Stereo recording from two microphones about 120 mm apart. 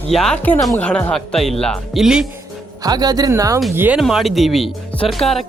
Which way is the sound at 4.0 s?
Centre (ahead or behind).